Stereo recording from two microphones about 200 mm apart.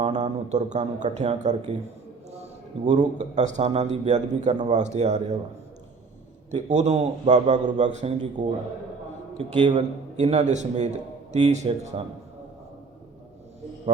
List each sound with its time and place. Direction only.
0.0 s a man's voice: 35° right (ahead or behind)
6.5 s a man's voice: 35° right (ahead or behind)
8.4 s a man's voice: 20° right (ahead or behind)
9.6 s a man's voice: 30° right (ahead or behind)